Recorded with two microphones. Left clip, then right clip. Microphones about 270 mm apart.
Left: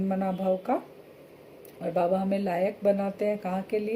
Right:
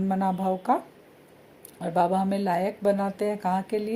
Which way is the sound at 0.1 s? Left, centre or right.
Right.